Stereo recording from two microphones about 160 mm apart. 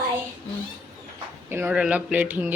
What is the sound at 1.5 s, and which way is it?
Speech, 10° right (ahead or behind).